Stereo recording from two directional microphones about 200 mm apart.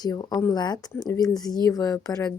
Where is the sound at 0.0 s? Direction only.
20° left (ahead or behind).